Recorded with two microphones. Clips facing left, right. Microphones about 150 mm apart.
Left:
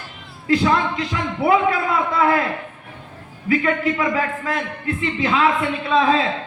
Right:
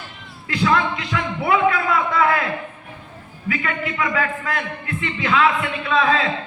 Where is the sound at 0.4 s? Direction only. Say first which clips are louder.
Left 2 dB; 35° left (ahead or behind).